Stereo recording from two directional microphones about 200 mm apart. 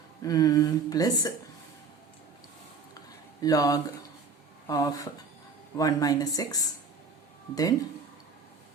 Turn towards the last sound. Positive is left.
turn(degrees=20)  # may be behind; listen again after turning